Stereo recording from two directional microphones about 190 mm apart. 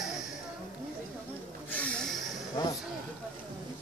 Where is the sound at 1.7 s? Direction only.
5° left (ahead or behind).